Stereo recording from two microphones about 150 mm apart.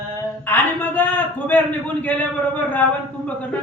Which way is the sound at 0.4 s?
10° left (ahead or behind).